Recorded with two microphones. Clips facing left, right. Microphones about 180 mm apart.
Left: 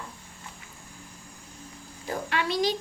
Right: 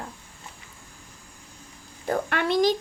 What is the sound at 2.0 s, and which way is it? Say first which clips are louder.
Speech: right 4 dB; 55° right (ahead or behind).